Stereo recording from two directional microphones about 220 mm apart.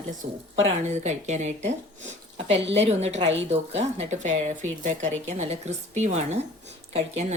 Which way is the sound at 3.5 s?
30° right (ahead or behind).